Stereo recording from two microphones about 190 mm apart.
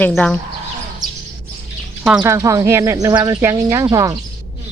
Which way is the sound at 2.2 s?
20° right (ahead or behind).